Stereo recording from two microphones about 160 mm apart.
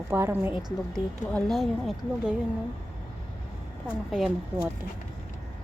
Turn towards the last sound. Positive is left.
turn(degrees=0)  # may be behind; listen again after turning